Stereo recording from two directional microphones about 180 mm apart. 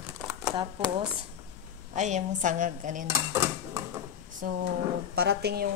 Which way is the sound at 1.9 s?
40° right (ahead or behind).